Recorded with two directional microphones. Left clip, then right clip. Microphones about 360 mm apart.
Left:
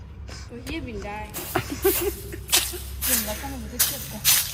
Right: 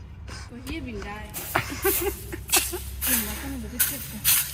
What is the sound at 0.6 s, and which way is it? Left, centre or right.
Speech, left.